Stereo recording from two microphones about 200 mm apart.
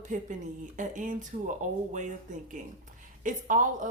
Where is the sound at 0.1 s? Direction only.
40° right (ahead or behind).